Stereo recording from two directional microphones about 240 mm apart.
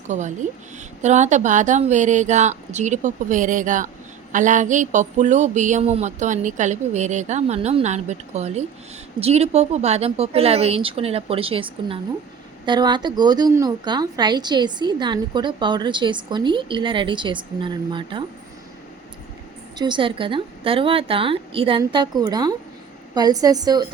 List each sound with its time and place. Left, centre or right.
0.1 s a woman's voice: right
19.8 s a woman's voice: right